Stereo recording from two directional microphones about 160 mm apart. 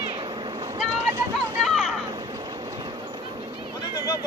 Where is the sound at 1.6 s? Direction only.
Centre (ahead or behind).